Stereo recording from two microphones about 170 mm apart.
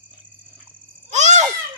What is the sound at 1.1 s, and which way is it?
Babbling, 45° right (ahead or behind).